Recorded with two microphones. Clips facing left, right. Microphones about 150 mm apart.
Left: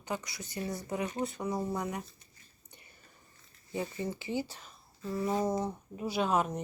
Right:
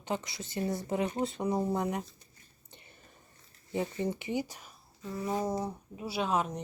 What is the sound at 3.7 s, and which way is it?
Speech, 20° right (ahead or behind).